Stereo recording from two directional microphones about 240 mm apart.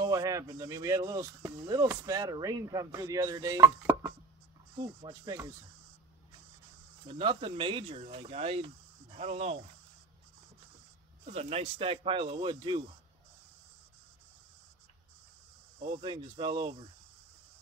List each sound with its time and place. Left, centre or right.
0.0 s speech: centre
7.1 s speech: right
11.2 s speech: right
15.8 s speech: right